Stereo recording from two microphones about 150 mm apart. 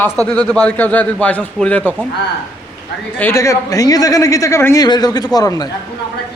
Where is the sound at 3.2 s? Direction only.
15° left (ahead or behind).